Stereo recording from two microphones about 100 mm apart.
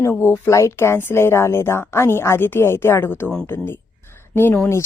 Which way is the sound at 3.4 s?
25° left (ahead or behind).